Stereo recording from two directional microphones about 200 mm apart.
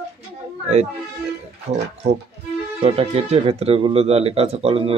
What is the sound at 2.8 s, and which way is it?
Speech, 30° right (ahead or behind).